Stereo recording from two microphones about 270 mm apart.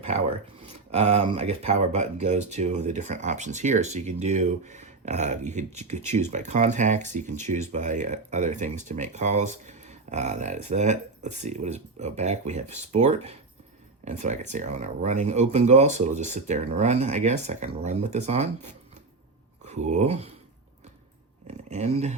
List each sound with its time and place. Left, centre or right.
0.9 s speech: right
19.6 s speech: right
21.4 s speech: right